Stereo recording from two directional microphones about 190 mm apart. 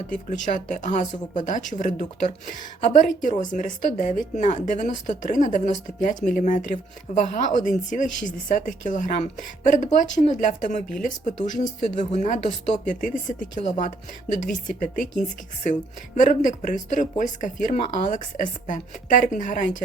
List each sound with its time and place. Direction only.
0.3 s speech: 40° left (ahead or behind)